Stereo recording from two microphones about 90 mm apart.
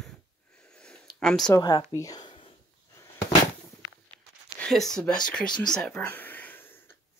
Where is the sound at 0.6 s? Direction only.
10° left (ahead or behind).